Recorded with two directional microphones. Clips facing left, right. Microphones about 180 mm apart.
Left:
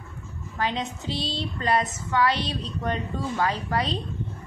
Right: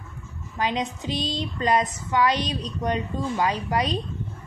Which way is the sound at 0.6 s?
15° right (ahead or behind).